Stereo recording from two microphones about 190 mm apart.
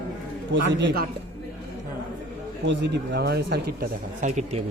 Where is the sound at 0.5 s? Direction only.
75° right (ahead or behind).